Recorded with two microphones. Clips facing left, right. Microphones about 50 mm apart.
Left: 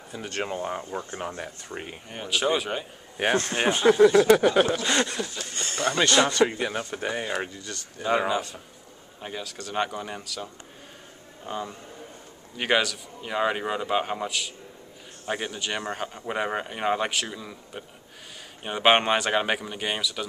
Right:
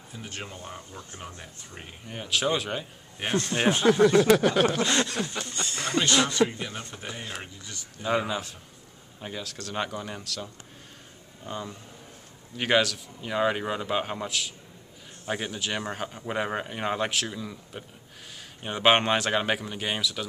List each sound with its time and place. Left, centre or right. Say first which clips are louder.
0.1 s speech: left 8 dB; left
2.0 s speech: left 1 dB; centre
5.5 s a sound: left 4 dB; left
6.0 s speech: left 3 dB; left
6.5 s speech: left 7 dB; left
8.3 s speech: left 5 dB; centre